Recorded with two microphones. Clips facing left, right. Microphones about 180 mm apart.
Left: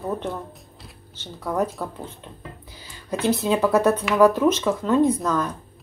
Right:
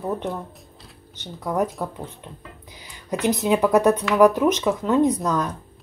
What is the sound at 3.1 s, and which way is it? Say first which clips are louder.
Speech: right 1 dB; 15° right (ahead or behind).